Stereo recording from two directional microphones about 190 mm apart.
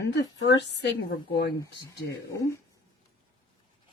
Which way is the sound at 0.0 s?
65° left (ahead or behind).